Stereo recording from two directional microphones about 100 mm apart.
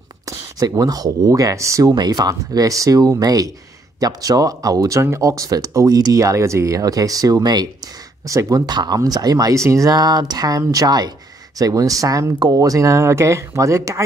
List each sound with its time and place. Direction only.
0.3 s speech: 35° right (ahead or behind)